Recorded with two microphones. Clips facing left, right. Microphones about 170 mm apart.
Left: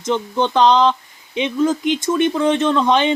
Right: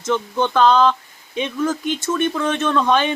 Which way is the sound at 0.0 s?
15° left (ahead or behind).